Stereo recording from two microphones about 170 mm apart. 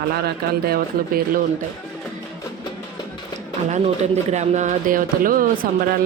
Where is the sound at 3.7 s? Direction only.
40° right (ahead or behind).